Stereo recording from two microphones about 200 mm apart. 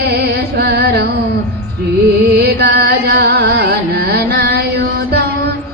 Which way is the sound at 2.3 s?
55° right (ahead or behind).